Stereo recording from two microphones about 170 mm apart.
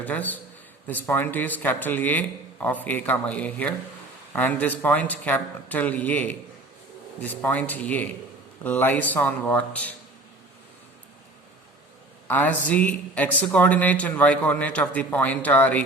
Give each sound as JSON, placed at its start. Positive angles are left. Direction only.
{"t": 0.0, "sound": "a man's voice", "side_deg": 10}
{"t": 12.3, "sound": "speech", "side_deg": 10}